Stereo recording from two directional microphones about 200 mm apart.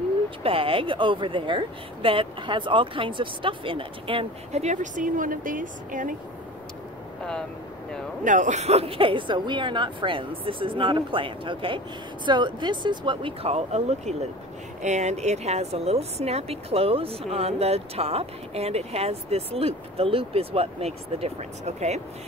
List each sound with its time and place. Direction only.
0.4 s speech: 25° right (ahead or behind)
8.2 s speech: 40° right (ahead or behind)